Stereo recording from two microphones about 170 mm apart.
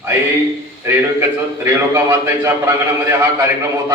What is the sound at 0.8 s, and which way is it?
A man's voice, 15° right (ahead or behind).